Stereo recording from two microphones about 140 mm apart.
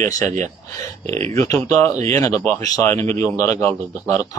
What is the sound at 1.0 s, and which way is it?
Speech, 45° right (ahead or behind).